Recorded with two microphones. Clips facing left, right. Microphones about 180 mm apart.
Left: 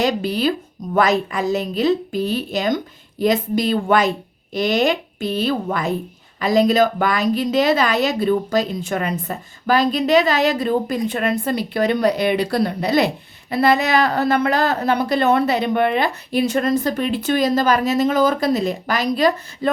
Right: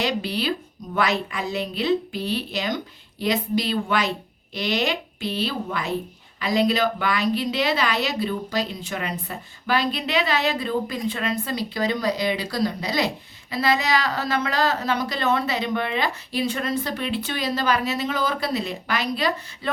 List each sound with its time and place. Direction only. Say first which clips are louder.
0.0 s a woman's voice: left 6 dB; 45° left (ahead or behind)